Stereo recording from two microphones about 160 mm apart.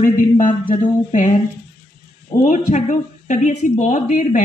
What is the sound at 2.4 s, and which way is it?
A woman's voice, 50° left (ahead or behind).